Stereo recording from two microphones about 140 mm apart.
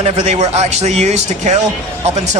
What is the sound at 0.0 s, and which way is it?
Speech, 55° right (ahead or behind).